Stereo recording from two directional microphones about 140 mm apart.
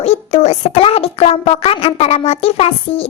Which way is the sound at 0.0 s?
55° left (ahead or behind).